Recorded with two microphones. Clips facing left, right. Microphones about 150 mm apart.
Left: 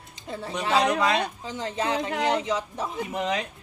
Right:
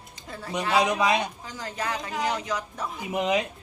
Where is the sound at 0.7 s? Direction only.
15° right (ahead or behind).